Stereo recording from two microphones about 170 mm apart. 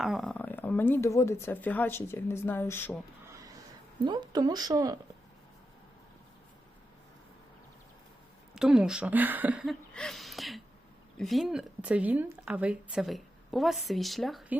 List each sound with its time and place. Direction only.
0.0 s speech: centre (ahead or behind)
4.0 s speech: 25° right (ahead or behind)
8.5 s a woman's voice: 5° right (ahead or behind)
9.9 s a sound: 5° left (ahead or behind)
11.2 s a woman's voice: centre (ahead or behind)